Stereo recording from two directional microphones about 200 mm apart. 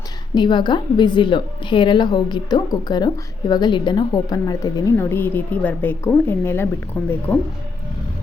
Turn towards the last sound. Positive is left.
turn(degrees=10)  # may be behind; listen again after turning